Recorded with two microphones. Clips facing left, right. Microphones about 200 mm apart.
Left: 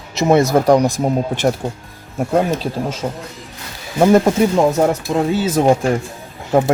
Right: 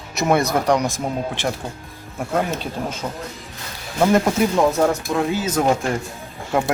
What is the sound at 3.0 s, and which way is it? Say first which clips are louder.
Speech: left 5 dB; 25° left (ahead or behind).